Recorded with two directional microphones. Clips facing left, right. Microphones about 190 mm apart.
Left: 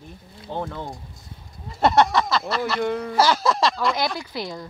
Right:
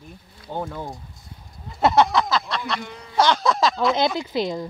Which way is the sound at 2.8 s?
60° left (ahead or behind).